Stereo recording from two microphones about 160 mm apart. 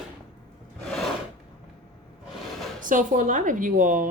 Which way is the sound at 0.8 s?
Centre (ahead or behind).